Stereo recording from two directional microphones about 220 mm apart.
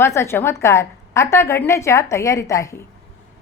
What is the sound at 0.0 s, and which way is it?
A woman's voice, 10° left (ahead or behind).